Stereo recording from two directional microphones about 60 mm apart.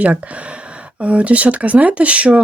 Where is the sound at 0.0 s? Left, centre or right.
Right.